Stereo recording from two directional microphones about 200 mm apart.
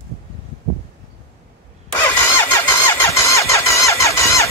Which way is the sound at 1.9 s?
15° left (ahead or behind).